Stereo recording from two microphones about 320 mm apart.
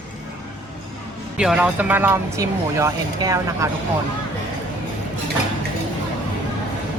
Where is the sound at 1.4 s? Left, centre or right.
Centre.